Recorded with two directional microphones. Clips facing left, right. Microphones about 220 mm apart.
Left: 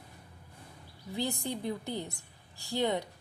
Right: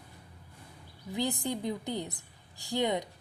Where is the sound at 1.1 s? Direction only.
15° right (ahead or behind).